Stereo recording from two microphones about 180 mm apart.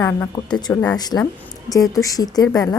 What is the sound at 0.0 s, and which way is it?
Speech, 15° left (ahead or behind).